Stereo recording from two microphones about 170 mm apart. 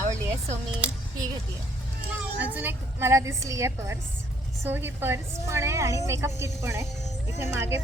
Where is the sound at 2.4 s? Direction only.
10° right (ahead or behind).